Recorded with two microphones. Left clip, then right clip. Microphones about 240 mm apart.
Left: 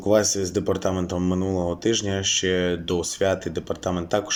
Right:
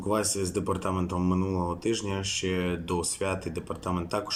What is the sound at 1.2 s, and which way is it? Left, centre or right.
Speech, left.